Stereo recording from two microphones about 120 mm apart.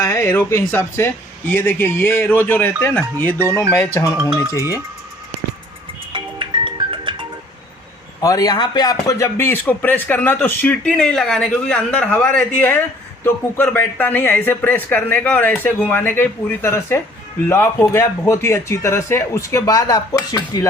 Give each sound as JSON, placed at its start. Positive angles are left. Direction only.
{"t": 0.0, "sound": "a man's voice", "side_deg": 25}
{"t": 4.4, "sound": "speech", "side_deg": -20}
{"t": 6.1, "sound": "music", "side_deg": -45}
{"t": 8.2, "sound": "a man's voice", "side_deg": 30}